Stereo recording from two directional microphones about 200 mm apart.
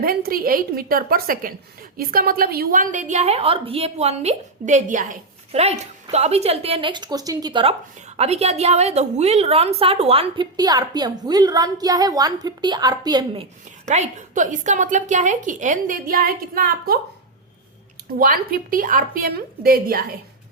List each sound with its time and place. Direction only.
0.0 s a woman's voice: 50° right (ahead or behind)
18.2 s a woman's voice: 45° right (ahead or behind)